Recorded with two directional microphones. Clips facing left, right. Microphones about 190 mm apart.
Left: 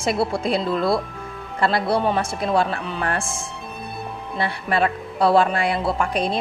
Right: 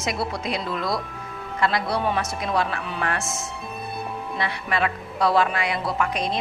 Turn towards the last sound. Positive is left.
turn(degrees=30)  # may be behind; listen again after turning